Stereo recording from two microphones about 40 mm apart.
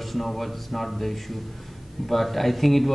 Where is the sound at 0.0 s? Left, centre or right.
Centre.